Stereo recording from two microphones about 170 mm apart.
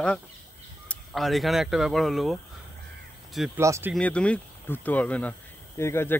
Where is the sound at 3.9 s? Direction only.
5° left (ahead or behind).